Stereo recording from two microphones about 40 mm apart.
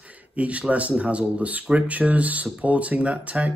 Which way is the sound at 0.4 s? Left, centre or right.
Right.